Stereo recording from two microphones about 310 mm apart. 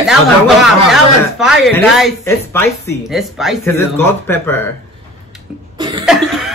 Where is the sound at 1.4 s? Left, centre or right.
Centre.